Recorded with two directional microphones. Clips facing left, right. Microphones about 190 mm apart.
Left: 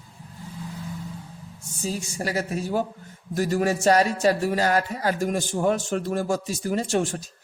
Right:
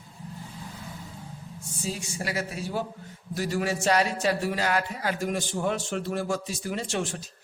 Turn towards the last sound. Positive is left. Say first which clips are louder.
# left 6 dB
turn(degrees=45)  # may be behind; listen again after turning